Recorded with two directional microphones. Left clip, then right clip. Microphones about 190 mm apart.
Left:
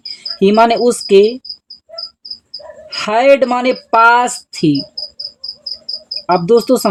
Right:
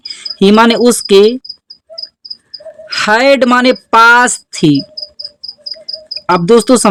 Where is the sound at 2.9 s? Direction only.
45° right (ahead or behind).